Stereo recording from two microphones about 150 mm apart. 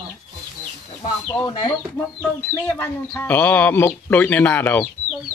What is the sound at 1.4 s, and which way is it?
Speech, 30° left (ahead or behind).